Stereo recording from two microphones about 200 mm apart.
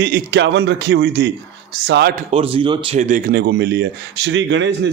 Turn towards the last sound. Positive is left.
turn(degrees=-65)  # may be behind; listen again after turning